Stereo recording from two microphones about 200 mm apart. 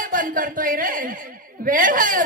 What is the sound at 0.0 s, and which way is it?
Speech, 45° right (ahead or behind).